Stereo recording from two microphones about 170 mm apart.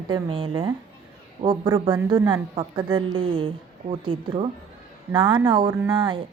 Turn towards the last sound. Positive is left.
turn(degrees=-30)  # may be behind; listen again after turning